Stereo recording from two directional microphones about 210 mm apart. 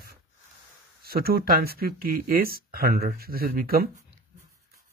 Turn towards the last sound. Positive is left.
turn(degrees=-45)  # may be behind; listen again after turning